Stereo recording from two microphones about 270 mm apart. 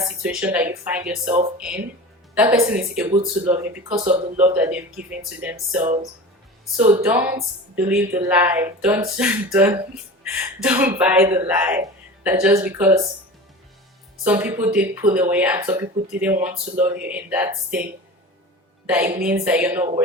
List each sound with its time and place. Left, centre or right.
0.0 s speech: centre
3.9 s speech: right
4.4 s speech: centre
14.3 s speech: centre
18.9 s speech: centre